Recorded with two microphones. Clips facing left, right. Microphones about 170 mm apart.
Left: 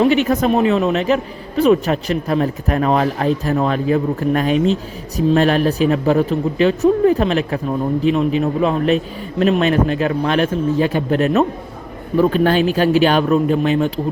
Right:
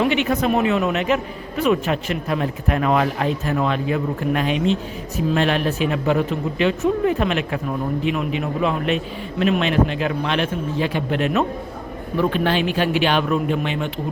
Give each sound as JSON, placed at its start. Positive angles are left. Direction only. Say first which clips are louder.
{"t": 0.0, "sound": "a man's voice", "louder": "left 5 dB", "side_deg": 40}